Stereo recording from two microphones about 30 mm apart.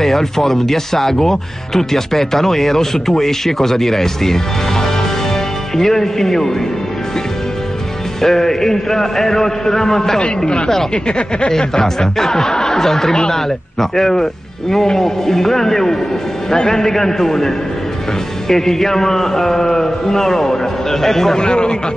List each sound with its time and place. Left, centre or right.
0.0 s speech: centre
8.2 s speech: centre
11.1 s speech: left
11.5 s speech: centre
18.5 s speech: centre
21.4 s a man's voice: left